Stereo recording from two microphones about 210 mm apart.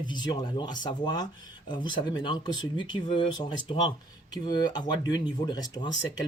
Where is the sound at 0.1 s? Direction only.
20° left (ahead or behind).